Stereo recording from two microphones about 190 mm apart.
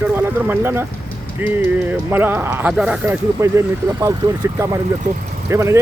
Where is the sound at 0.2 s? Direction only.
10° right (ahead or behind).